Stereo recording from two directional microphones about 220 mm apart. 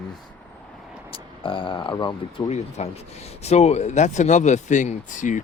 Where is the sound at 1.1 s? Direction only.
25° left (ahead or behind).